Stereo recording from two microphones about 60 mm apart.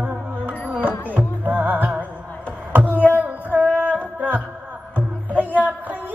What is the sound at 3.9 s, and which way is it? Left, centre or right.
Music, right.